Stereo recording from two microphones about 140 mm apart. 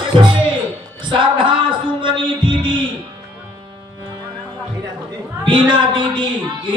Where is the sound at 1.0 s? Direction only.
35° right (ahead or behind).